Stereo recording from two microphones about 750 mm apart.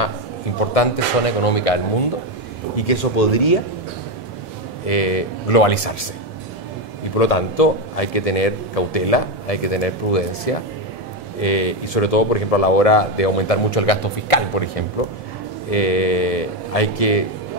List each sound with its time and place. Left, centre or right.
0.7 s a man's voice: left
4.8 s a man's voice: left
7.2 s a man's voice: left
15.7 s a man's voice: left